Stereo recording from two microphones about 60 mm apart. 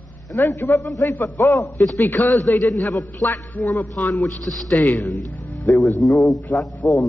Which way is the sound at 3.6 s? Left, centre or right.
Left.